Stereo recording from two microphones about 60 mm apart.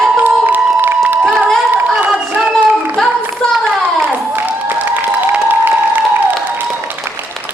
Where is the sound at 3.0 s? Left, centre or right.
Centre.